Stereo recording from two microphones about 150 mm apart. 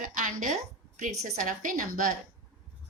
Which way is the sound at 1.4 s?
65° right (ahead or behind).